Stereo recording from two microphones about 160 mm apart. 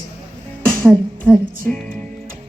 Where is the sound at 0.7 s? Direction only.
15° right (ahead or behind).